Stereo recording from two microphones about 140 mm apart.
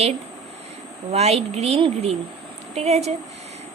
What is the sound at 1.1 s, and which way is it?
A woman's voice, 50° right (ahead or behind).